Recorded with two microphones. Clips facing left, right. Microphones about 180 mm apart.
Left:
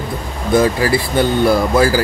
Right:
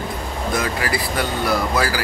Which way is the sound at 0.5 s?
30° left (ahead or behind).